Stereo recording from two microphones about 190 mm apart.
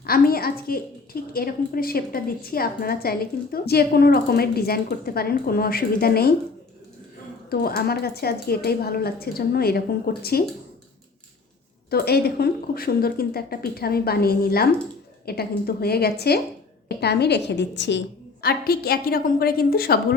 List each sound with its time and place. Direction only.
0.0 s a woman's voice: 50° left (ahead or behind)
7.5 s a woman's voice: 55° left (ahead or behind)
11.9 s a woman's voice: 55° left (ahead or behind)
18.4 s a woman's voice: 55° left (ahead or behind)